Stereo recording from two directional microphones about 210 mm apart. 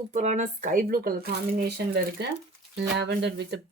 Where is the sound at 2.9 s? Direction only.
55° right (ahead or behind).